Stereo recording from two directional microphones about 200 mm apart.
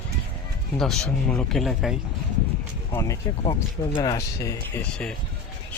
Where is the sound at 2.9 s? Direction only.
15° left (ahead or behind).